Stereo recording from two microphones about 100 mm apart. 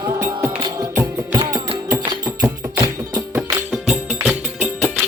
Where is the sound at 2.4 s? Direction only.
35° right (ahead or behind).